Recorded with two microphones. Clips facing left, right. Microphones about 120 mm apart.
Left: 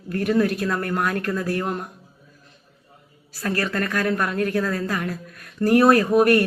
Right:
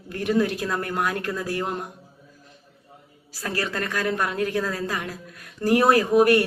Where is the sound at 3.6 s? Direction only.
20° right (ahead or behind).